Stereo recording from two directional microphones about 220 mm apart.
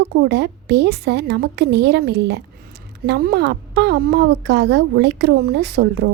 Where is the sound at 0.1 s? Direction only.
50° right (ahead or behind).